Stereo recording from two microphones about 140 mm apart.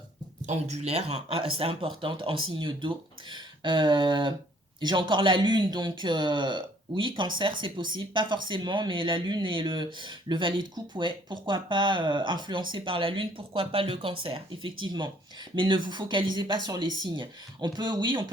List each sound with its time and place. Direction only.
0.4 s speech: 50° right (ahead or behind); by 18.3 s 35° right (ahead or behind)